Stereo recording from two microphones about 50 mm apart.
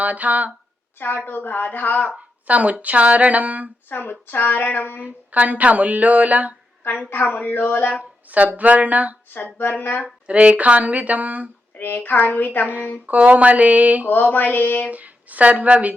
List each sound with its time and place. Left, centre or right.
0.0 s speech: right
0.9 s a woman's voice: left
2.1 s speech: right
3.8 s speech: left
4.9 s speech: right
7.1 s speech: left
8.3 s speech: right
9.3 s speech: left
10.2 s speech: right
11.8 s a woman's voice: left
13.1 s speech: right
14.1 s a woman's voice: left
14.8 s speech: right